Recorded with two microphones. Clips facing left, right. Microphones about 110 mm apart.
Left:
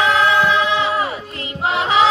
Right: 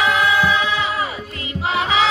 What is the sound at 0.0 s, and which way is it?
Music, 10° right (ahead or behind).